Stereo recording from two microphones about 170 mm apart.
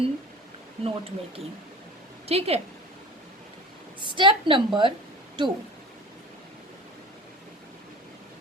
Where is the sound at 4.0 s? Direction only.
30° right (ahead or behind).